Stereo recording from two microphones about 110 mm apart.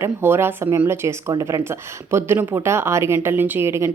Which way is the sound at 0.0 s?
20° right (ahead or behind).